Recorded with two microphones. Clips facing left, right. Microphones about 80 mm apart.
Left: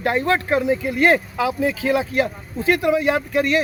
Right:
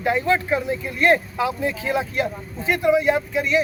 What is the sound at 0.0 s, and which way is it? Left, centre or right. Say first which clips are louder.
Speech: left 1 dB; left.